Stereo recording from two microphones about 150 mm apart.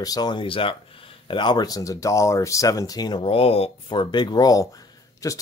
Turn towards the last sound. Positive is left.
turn(degrees=20)  # may be behind; listen again after turning